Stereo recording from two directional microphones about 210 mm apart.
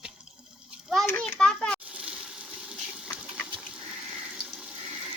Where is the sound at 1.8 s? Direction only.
5° right (ahead or behind).